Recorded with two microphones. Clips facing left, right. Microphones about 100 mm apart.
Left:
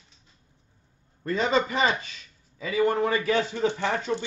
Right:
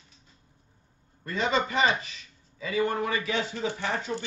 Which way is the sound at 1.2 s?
35° left (ahead or behind).